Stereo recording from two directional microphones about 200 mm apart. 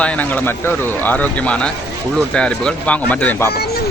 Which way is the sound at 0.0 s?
5° left (ahead or behind).